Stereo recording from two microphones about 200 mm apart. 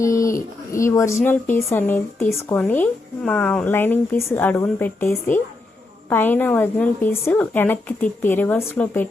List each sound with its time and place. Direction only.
0.0 s a woman's voice: 15° left (ahead or behind)